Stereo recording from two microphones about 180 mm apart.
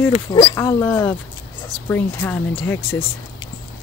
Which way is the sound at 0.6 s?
15° left (ahead or behind).